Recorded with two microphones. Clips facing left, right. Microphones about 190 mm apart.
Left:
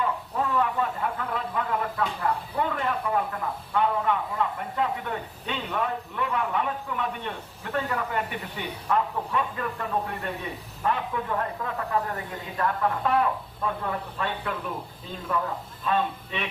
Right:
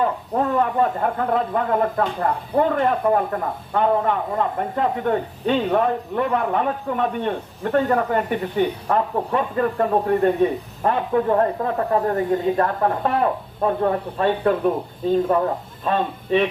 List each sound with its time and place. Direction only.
0.0 s speech: 45° right (ahead or behind)
15.8 s speech: 40° right (ahead or behind)